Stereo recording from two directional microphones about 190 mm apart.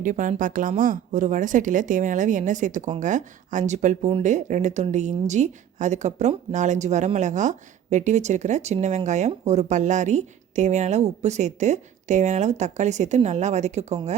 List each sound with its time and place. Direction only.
0.0 s a woman's voice: 45° right (ahead or behind)